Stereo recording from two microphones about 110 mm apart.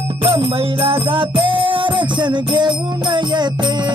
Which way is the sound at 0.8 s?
50° right (ahead or behind).